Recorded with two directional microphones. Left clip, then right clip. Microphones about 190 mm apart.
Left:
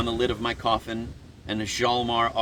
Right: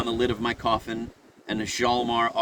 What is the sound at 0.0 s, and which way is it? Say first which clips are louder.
Speech: even; 50° right (ahead or behind).